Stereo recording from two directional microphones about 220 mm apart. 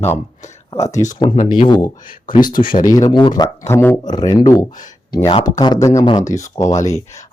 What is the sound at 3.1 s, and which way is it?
Speech, 20° left (ahead or behind).